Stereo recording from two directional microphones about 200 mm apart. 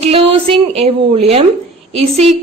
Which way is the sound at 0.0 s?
30° right (ahead or behind).